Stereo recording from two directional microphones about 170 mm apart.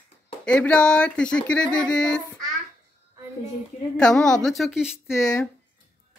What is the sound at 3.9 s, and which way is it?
Speech, 5° left (ahead or behind).